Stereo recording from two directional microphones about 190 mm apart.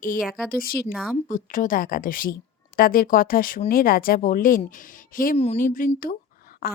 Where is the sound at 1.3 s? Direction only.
45° left (ahead or behind).